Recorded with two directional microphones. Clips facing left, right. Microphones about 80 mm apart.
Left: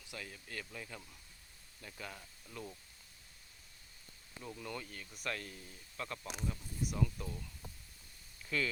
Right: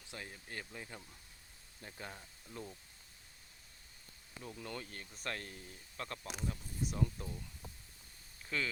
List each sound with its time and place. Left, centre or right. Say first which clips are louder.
0.0 s speech: even; right
4.6 s speech: even; right
8.4 s speech: left 2 dB; right